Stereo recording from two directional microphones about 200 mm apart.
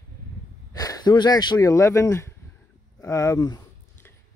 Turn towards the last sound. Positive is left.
turn(degrees=20)  # may be behind; listen again after turning